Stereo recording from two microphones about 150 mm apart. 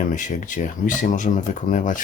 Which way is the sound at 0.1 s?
55° left (ahead or behind).